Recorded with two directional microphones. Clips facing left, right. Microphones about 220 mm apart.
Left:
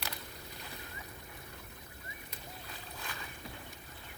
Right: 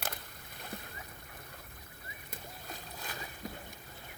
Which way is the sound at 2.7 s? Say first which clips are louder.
Right 3 dB; 40° right (ahead or behind).